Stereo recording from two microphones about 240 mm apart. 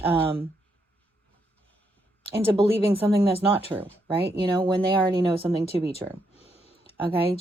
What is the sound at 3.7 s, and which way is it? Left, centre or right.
Speech, centre.